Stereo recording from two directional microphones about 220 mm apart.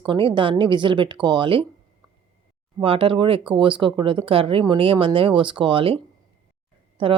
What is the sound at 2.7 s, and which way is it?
Speech, 25° right (ahead or behind).